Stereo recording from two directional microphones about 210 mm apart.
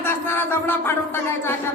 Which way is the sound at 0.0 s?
10° left (ahead or behind).